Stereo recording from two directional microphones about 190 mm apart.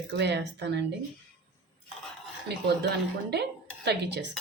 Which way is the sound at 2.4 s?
60° right (ahead or behind).